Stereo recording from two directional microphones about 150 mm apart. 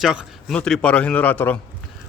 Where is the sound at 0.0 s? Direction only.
Centre (ahead or behind).